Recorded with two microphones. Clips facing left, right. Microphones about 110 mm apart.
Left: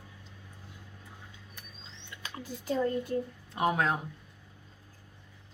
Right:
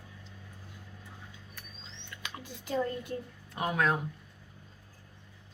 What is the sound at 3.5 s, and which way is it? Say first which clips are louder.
Speech: left 1 dB; 25° left (ahead or behind).